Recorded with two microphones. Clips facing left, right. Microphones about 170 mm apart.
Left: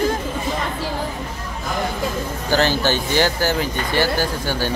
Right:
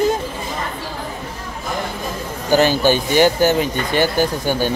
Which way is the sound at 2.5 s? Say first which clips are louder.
Right 4 dB; 15° right (ahead or behind).